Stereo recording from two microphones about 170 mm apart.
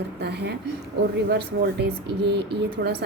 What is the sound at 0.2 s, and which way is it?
Speech, 75° right (ahead or behind).